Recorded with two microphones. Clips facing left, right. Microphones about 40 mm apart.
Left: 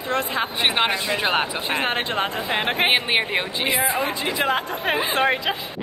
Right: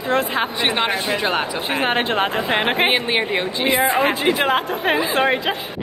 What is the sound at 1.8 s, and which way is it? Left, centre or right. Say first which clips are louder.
Speech: right 7 dB; centre.